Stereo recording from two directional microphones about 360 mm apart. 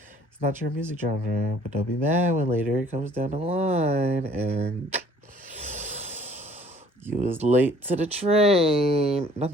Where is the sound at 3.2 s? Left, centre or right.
Centre.